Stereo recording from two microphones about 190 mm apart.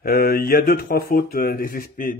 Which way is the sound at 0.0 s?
50° left (ahead or behind).